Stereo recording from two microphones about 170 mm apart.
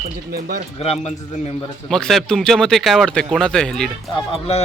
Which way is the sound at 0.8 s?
35° left (ahead or behind).